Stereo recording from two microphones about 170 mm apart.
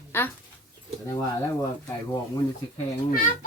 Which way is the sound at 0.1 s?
15° left (ahead or behind).